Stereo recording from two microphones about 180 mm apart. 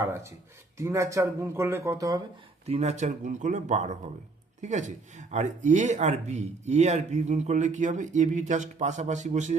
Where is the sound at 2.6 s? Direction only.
35° right (ahead or behind).